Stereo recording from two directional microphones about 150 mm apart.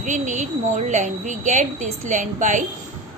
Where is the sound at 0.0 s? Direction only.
55° right (ahead or behind).